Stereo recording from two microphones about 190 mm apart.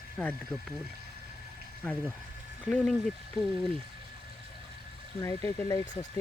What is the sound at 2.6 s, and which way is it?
Speech, 5° left (ahead or behind).